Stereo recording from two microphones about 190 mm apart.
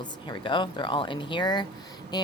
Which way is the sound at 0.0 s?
25° left (ahead or behind).